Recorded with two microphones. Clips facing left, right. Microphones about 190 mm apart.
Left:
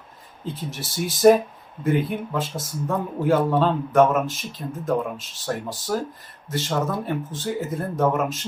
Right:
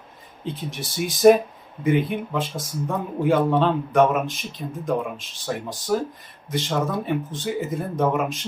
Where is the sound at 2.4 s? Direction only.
Centre (ahead or behind).